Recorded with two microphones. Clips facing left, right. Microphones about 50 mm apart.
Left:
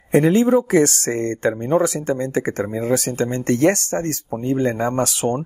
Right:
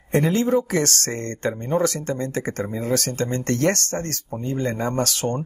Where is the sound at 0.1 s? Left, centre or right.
Centre.